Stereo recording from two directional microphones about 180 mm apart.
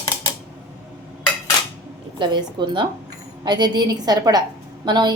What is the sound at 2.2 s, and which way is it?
A woman's voice, 25° right (ahead or behind).